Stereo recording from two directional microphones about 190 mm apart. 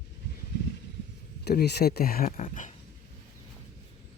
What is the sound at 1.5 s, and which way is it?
Speech, 60° left (ahead or behind).